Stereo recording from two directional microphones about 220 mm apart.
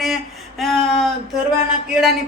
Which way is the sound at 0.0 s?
Centre (ahead or behind).